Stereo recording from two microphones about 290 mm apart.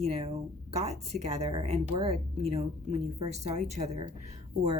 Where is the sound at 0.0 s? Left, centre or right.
Right.